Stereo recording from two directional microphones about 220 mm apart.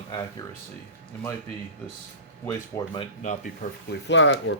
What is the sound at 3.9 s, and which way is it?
Speech, 55° left (ahead or behind).